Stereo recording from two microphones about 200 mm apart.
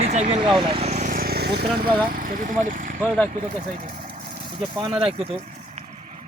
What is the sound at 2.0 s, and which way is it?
Speech, 45° right (ahead or behind).